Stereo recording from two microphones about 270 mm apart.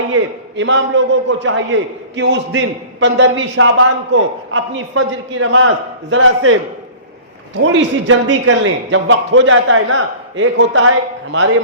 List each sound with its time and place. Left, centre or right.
0.1 s a man's voice: right